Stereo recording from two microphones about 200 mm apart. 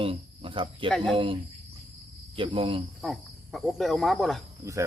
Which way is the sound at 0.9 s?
Centre (ahead or behind).